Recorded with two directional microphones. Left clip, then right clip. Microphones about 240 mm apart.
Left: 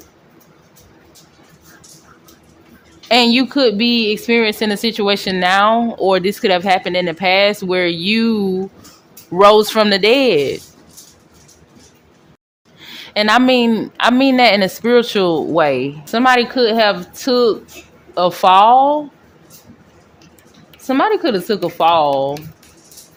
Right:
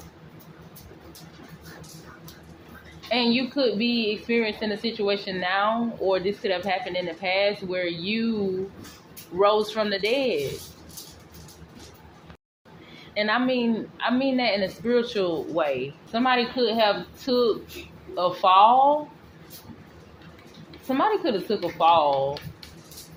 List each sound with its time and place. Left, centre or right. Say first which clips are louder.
3.1 s speech: left 11 dB; left
9.4 s speech: left 12 dB; left
13.1 s speech: left 12 dB; left
20.8 s speech: left 8 dB; left